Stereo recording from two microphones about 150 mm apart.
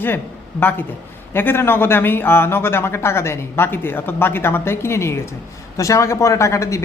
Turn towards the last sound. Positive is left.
turn(degrees=20)  # may be behind; listen again after turning